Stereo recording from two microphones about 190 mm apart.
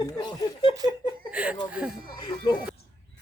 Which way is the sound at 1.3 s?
5° right (ahead or behind).